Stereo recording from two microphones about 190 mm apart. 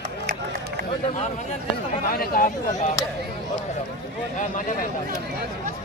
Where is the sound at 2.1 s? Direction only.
50° left (ahead or behind).